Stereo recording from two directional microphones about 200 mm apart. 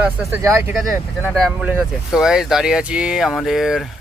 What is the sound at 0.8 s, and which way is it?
Speech, centre (ahead or behind).